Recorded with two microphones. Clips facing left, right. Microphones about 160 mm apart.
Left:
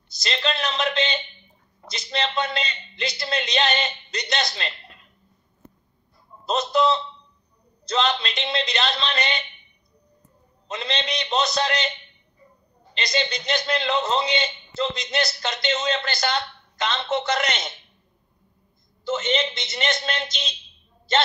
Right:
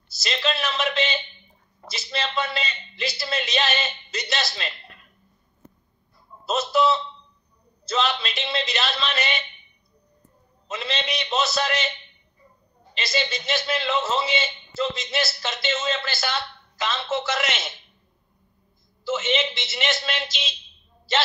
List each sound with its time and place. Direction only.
0.1 s a man's voice: 5° right (ahead or behind)
6.7 s a man's voice: 5° right (ahead or behind)
10.7 s a man's voice: 5° right (ahead or behind)
12.9 s a man's voice: 5° right (ahead or behind)
19.0 s a man's voice: 5° right (ahead or behind)